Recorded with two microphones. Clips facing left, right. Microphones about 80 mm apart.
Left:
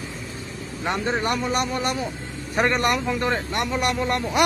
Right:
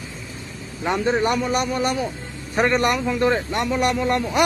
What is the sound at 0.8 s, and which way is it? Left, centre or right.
Speech, centre.